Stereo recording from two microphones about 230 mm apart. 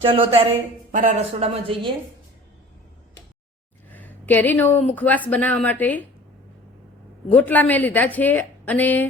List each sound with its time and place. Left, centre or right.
0.0 s a woman's voice: right
3.8 s a sound: centre
4.9 s a woman's voice: centre
7.3 s a woman's voice: centre